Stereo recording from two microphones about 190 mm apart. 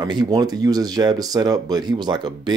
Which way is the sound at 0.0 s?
20° right (ahead or behind).